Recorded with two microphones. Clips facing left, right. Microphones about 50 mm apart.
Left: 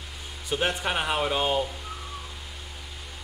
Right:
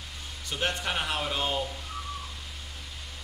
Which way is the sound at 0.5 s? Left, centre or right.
Centre.